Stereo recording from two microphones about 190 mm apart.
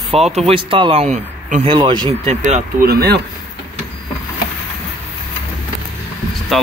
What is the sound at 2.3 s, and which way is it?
Speech, 40° right (ahead or behind).